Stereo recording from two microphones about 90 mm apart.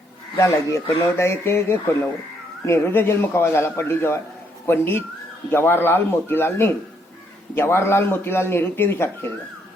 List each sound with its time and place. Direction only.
0.3 s a man's voice: 30° left (ahead or behind)